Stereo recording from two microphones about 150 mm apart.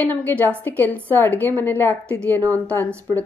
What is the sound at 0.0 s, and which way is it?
Speech, 10° left (ahead or behind).